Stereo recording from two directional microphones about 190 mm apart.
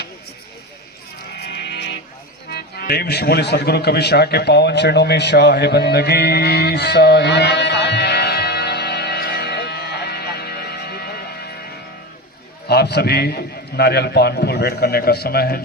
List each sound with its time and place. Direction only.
1.4 s music: 60° left (ahead or behind)
12.6 s a man's voice: 60° left (ahead or behind)